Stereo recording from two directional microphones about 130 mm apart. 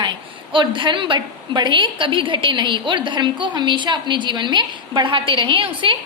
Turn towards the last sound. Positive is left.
turn(degrees=-40)  # may be behind; listen again after turning